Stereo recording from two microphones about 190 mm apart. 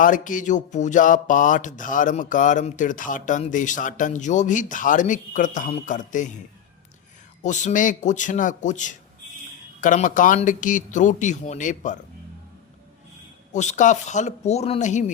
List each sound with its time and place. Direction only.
0.0 s speech: 45° left (ahead or behind)
7.4 s a man's voice: 40° left (ahead or behind)
13.5 s a man's voice: 40° left (ahead or behind)